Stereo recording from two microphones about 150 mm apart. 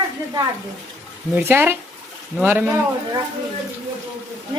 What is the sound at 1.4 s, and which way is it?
Speech, 15° right (ahead or behind).